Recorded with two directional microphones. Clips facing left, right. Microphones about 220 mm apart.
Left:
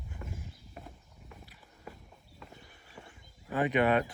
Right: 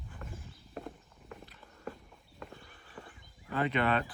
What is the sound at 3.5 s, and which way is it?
Speech, 15° left (ahead or behind).